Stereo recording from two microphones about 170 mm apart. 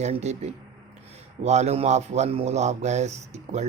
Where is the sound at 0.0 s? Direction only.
40° right (ahead or behind).